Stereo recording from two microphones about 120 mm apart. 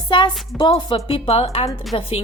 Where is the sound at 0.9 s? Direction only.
50° left (ahead or behind).